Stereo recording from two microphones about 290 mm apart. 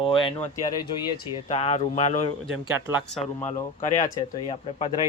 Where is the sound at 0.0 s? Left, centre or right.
Centre.